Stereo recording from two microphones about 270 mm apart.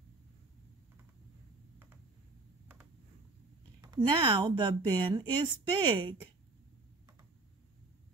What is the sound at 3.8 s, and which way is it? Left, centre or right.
Speech, centre.